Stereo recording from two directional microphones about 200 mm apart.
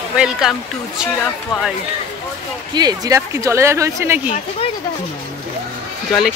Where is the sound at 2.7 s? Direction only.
20° right (ahead or behind).